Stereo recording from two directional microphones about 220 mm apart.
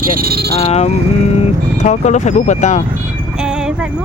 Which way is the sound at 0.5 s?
30° left (ahead or behind).